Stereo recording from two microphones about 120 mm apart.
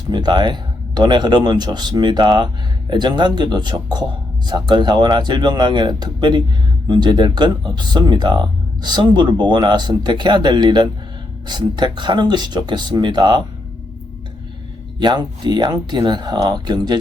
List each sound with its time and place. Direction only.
0.1 s speech: 40° right (ahead or behind)
14.9 s speech: 40° right (ahead or behind)